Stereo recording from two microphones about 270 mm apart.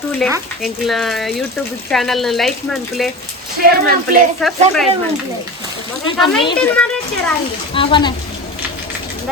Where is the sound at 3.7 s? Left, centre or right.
Right.